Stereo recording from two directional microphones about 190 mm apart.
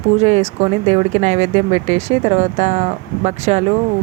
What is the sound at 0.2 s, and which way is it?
Speech, 35° right (ahead or behind).